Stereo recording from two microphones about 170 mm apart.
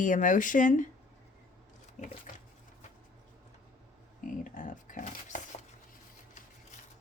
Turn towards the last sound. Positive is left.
turn(degrees=45)  # may be behind; listen again after turning